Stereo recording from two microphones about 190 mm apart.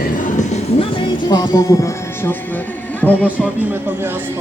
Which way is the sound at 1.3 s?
20° left (ahead or behind).